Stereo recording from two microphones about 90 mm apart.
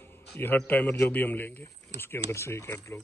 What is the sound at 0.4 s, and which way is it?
A man's voice, 20° left (ahead or behind).